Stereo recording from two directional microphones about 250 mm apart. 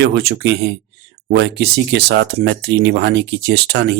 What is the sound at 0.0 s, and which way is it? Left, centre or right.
Speech, right.